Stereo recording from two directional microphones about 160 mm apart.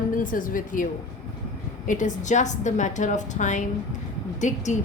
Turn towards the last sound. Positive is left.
turn(degrees=50)  # may be behind; listen again after turning